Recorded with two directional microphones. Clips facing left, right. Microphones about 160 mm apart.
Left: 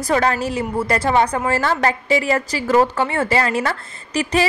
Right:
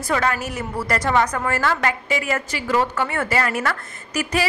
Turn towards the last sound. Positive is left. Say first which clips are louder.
# left 4 dB
turn(degrees=30)  # may be behind; listen again after turning